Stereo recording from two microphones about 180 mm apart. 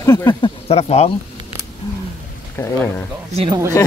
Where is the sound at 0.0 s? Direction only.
20° left (ahead or behind).